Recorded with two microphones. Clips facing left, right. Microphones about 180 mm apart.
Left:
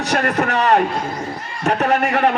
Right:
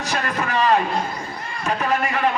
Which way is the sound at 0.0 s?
70° left (ahead or behind).